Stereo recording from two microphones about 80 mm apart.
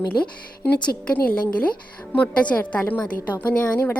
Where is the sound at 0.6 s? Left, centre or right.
Centre.